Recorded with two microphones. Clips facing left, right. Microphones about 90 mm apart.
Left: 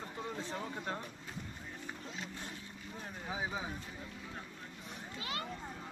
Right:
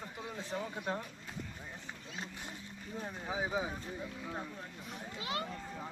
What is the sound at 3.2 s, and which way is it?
Speech, 20° right (ahead or behind).